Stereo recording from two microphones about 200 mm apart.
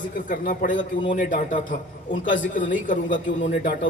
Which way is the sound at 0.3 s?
40° left (ahead or behind).